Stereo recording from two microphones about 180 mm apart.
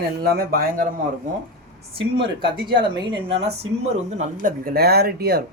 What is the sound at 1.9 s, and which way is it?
A woman's voice, 30° right (ahead or behind).